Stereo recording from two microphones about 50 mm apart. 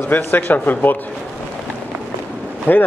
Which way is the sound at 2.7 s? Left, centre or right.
Left.